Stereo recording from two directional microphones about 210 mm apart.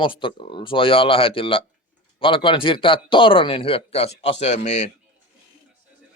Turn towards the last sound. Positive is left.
turn(degrees=35)  # may be behind; listen again after turning